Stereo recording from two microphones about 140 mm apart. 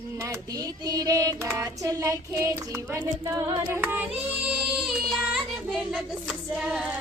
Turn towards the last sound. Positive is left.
turn(degrees=-5)  # may be behind; listen again after turning